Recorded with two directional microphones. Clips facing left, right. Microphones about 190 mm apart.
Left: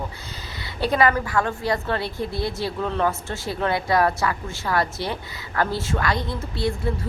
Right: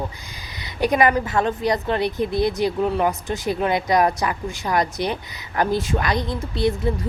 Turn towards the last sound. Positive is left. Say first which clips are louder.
# right 4 dB
turn(degrees=-20)  # may be behind; listen again after turning